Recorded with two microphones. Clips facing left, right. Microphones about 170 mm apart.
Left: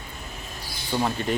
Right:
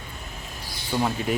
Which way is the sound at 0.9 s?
5° right (ahead or behind).